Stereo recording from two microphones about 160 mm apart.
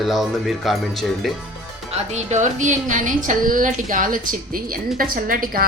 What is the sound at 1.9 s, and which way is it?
A woman's voice, 45° right (ahead or behind).